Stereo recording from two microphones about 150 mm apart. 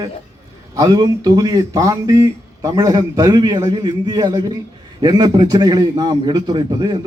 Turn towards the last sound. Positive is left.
turn(degrees=-30)  # may be behind; listen again after turning